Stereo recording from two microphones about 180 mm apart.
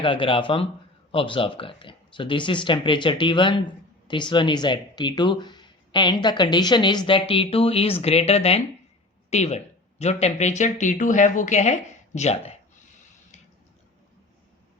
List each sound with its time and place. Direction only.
0.0 s a woman's voice: 30° left (ahead or behind)